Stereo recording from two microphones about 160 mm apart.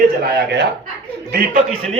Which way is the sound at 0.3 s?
90° right.